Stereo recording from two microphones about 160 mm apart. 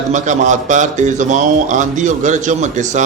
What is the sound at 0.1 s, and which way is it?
A man's voice, 50° right (ahead or behind).